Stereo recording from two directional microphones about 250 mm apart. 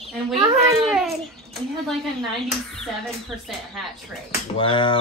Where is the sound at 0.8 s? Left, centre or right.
Centre.